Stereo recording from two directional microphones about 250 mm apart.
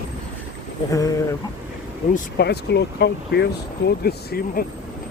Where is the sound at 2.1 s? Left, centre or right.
Left.